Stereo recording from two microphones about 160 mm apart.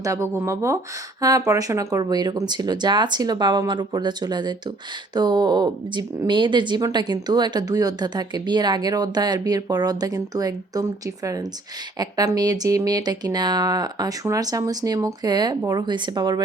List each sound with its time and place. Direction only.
0.0 s speech: 20° right (ahead or behind)